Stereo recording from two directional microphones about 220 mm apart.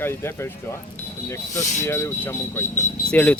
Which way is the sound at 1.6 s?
35° left (ahead or behind).